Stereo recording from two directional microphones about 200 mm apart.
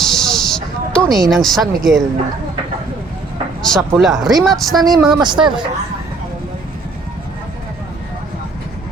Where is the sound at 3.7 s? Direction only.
Centre (ahead or behind).